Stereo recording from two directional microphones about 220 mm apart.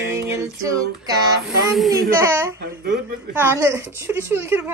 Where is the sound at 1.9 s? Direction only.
10° right (ahead or behind).